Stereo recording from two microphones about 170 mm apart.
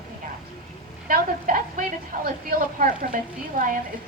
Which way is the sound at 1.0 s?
50° right (ahead or behind).